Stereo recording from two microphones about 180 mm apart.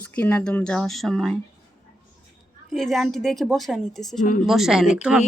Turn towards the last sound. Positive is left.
turn(degrees=-5)  # may be behind; listen again after turning